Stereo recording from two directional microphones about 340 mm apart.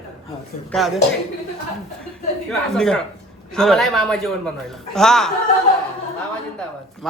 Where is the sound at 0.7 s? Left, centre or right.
Centre.